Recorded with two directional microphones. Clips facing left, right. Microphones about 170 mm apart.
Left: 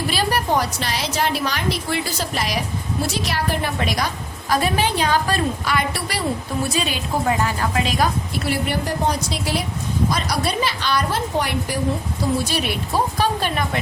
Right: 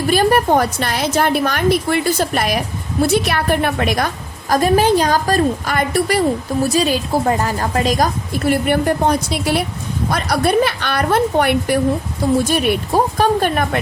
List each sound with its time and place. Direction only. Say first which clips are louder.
0.1 s a woman's voice: right 9 dB; 50° right (ahead or behind)
12.5 s a woman's voice: right 7 dB; 50° right (ahead or behind)